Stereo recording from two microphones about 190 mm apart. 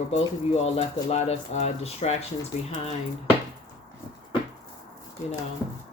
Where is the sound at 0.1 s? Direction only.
35° left (ahead or behind).